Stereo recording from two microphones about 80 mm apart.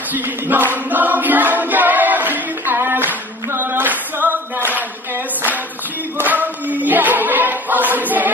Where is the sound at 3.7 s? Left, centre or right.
Right.